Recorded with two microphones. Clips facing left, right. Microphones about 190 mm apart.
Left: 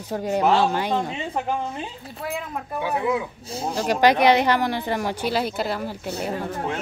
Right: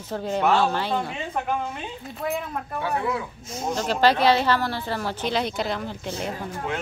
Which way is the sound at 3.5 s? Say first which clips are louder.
Right 2 dB; 35° left (ahead or behind).